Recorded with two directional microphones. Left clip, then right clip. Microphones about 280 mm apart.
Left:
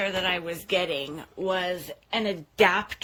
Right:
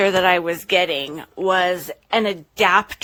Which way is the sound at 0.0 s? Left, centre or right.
Centre.